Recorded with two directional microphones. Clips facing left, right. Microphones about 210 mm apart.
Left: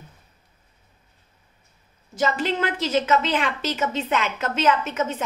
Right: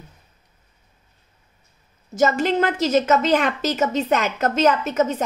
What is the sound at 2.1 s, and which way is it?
A woman's voice, 45° right (ahead or behind).